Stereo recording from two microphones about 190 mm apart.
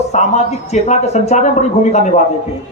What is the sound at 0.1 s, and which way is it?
A man's voice, 35° left (ahead or behind).